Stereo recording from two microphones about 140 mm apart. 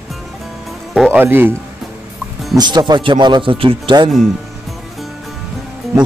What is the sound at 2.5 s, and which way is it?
A man's voice, 30° right (ahead or behind).